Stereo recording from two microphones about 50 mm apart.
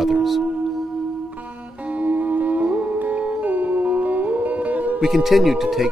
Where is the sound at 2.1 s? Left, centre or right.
Right.